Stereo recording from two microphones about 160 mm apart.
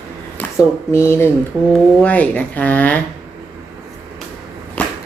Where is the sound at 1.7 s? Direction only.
10° left (ahead or behind).